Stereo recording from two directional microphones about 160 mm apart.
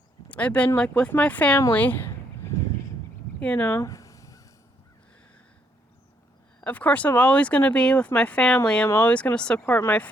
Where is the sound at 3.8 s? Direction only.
20° left (ahead or behind).